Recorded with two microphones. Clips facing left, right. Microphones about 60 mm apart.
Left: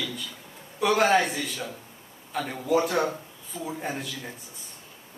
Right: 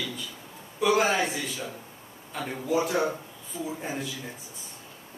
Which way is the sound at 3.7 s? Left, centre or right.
Centre.